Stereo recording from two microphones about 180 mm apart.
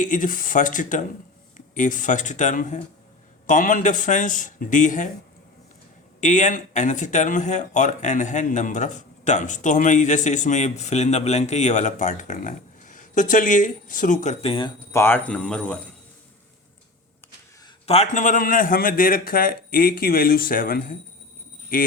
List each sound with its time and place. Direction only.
0.0 s speech: 45° left (ahead or behind)
6.1 s speech: 45° left (ahead or behind)
14.9 s a man's voice: 10° left (ahead or behind)
17.8 s speech: 35° left (ahead or behind)